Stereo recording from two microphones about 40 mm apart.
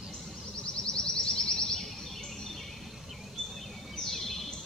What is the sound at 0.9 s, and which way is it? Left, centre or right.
Music, centre.